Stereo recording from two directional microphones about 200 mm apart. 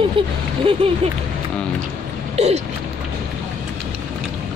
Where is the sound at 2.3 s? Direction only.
30° right (ahead or behind).